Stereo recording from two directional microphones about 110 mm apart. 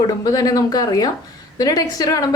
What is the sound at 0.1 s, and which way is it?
A woman's voice, 35° left (ahead or behind).